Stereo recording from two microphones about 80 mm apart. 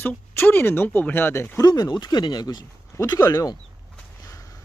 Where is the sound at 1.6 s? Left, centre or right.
Left.